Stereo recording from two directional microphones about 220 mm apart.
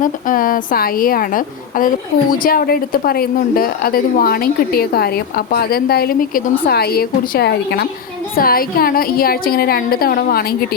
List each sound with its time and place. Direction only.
0.0 s a woman's voice: 40° left (ahead or behind)